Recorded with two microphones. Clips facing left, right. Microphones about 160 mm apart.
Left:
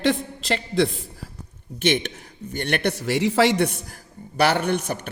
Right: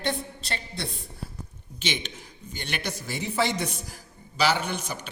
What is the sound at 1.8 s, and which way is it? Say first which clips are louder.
A man's voice: left 10 dB; 60° left (ahead or behind).